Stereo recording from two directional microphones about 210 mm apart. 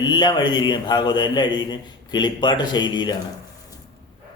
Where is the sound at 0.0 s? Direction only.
20° left (ahead or behind).